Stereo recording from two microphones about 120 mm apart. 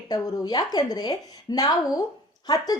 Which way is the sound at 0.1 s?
35° left (ahead or behind).